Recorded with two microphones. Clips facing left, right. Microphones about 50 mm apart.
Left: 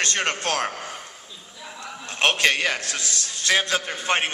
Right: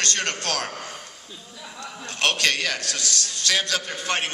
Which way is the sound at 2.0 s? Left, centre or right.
Left.